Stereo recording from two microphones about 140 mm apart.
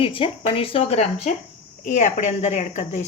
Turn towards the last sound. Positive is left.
turn(degrees=55)  # may be behind; listen again after turning